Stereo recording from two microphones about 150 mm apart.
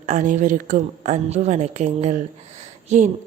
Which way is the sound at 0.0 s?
55° right (ahead or behind).